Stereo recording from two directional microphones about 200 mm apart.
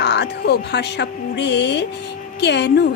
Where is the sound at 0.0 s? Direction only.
60° left (ahead or behind).